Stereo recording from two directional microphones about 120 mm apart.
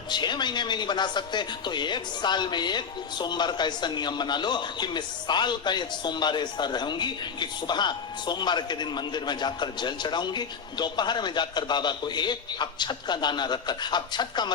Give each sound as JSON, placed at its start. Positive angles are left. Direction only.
{"t": 0.1, "sound": "speech", "side_deg": 40}